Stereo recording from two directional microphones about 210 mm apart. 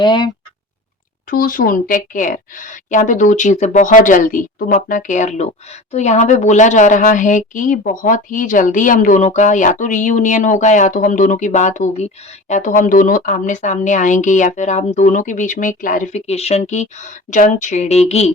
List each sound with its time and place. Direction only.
0.0 s speech: 20° left (ahead or behind)
1.3 s speech: 40° left (ahead or behind)